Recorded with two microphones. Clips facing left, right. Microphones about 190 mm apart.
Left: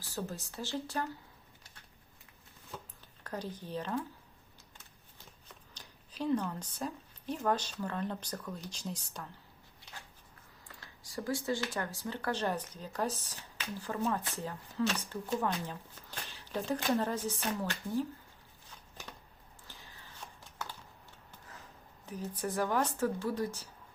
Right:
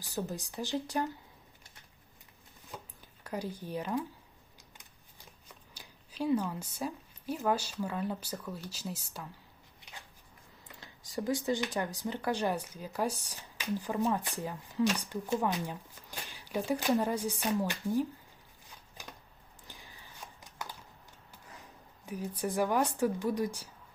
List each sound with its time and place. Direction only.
0.0 s speech: 15° right (ahead or behind)
3.2 s speech: 10° right (ahead or behind)
5.7 s speech: 10° right (ahead or behind)
10.7 s speech: 20° right (ahead or behind)
19.6 s a sound: 15° right (ahead or behind)
22.0 s speech: 10° right (ahead or behind)